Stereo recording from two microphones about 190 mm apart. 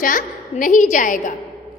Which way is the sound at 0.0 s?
45° left (ahead or behind).